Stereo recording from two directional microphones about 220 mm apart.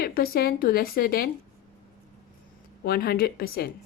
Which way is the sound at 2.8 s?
45° left (ahead or behind).